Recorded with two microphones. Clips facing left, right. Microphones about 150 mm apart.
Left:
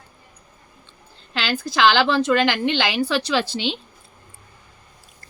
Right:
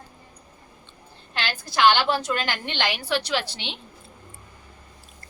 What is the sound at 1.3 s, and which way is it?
A woman's voice, 90° left.